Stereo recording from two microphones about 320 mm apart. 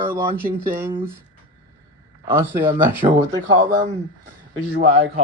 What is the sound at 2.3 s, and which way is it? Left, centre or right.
Speech, centre.